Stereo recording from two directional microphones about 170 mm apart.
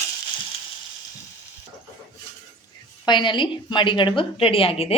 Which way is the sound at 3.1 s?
25° left (ahead or behind).